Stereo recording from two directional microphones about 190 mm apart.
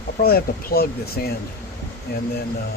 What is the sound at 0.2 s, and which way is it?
Speech, 50° left (ahead or behind).